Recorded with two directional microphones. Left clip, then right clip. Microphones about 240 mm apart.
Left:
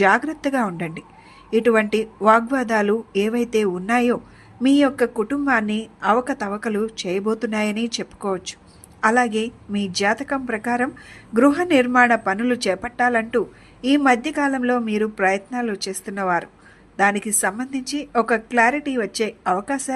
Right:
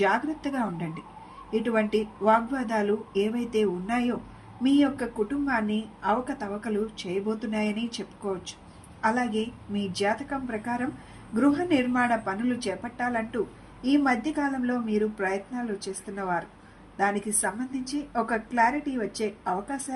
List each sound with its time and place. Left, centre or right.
0.0 s a woman's voice: left